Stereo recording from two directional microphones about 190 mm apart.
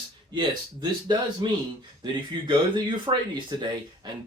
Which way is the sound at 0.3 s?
25° right (ahead or behind).